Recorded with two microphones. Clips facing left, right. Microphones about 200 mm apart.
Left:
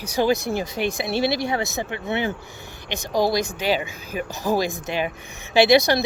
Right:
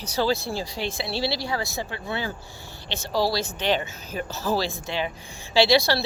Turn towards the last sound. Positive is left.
turn(degrees=20)  # may be behind; listen again after turning